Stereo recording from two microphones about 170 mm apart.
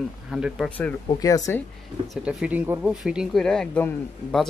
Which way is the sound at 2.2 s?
10° right (ahead or behind).